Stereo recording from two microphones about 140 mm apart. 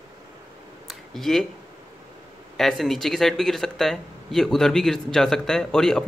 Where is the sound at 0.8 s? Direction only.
Centre (ahead or behind).